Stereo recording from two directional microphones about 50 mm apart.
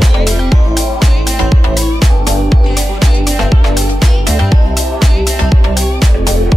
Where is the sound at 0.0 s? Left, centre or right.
Centre.